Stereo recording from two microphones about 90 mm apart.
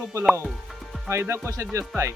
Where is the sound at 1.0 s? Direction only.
30° right (ahead or behind).